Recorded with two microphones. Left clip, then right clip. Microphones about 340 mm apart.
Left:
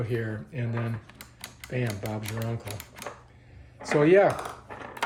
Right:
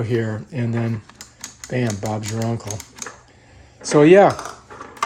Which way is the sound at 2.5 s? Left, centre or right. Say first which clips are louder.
Right 9 dB; right.